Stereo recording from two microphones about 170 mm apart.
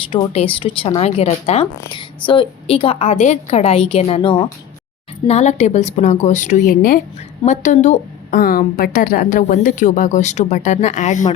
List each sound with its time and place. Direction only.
0.1 s a woman's voice: 30° left (ahead or behind)